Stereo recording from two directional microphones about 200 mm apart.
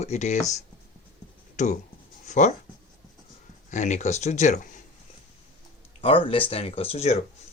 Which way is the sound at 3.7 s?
35° left (ahead or behind).